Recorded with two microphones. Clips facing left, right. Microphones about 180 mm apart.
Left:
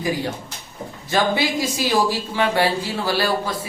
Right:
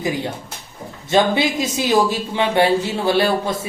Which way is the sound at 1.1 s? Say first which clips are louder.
Right 3 dB; 20° right (ahead or behind).